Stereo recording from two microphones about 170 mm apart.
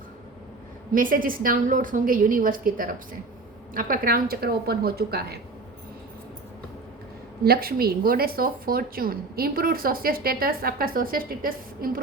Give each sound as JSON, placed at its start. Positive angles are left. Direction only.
{"t": 0.9, "sound": "a woman's voice", "side_deg": -55}
{"t": 7.4, "sound": "a woman's voice", "side_deg": -65}